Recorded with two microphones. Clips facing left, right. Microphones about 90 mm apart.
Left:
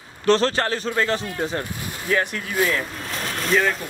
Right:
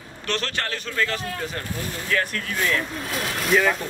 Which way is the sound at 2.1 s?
15° left (ahead or behind).